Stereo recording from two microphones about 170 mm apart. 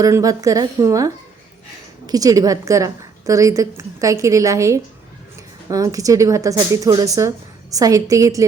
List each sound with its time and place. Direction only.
0.0 s speech: 20° right (ahead or behind)